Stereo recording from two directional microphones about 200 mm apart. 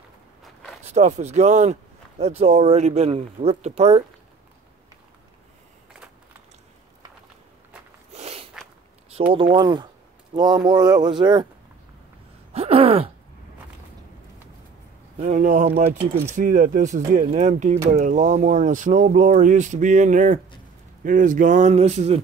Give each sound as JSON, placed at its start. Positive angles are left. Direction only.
{"t": 0.4, "sound": "a sound", "side_deg": 0}
{"t": 0.8, "sound": "speech", "side_deg": -35}
{"t": 8.1, "sound": "snort", "side_deg": -30}
{"t": 9.3, "sound": "speech", "side_deg": -25}
{"t": 12.5, "sound": "gasp", "side_deg": -30}
{"t": 15.1, "sound": "speech", "side_deg": -35}